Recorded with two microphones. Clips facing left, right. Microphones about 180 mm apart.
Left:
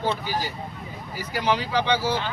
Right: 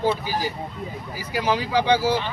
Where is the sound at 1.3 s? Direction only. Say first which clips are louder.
Right 2 dB; 10° right (ahead or behind).